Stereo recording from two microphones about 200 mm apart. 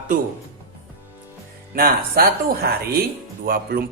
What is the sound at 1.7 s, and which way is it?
A woman's voice, 50° right (ahead or behind).